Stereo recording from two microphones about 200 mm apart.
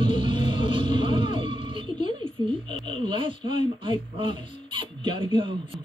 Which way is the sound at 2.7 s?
25° right (ahead or behind).